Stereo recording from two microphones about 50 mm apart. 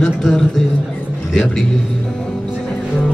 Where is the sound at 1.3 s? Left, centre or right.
Centre.